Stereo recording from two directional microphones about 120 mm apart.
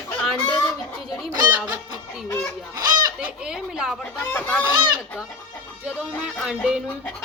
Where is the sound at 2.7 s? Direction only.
35° right (ahead or behind).